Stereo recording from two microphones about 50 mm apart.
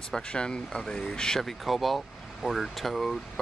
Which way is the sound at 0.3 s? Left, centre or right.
Centre.